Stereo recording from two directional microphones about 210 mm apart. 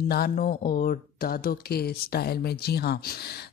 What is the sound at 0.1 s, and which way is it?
Speech, 45° left (ahead or behind).